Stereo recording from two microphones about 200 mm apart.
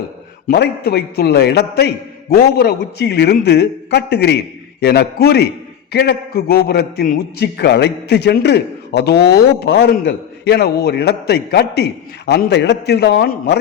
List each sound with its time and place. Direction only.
0.4 s a man's voice: 55° left (ahead or behind)